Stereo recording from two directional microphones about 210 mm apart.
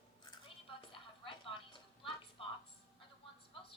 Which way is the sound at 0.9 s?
25° left (ahead or behind).